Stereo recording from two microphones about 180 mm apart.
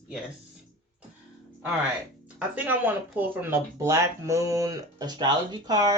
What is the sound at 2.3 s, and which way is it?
Speech, 10° right (ahead or behind).